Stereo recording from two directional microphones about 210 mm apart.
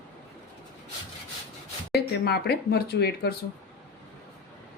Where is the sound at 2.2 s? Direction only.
50° left (ahead or behind).